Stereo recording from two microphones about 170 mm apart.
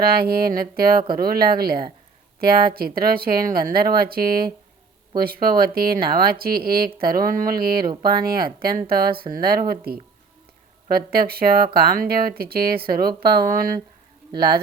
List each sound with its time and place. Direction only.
0.0 s speech: 65° right (ahead or behind)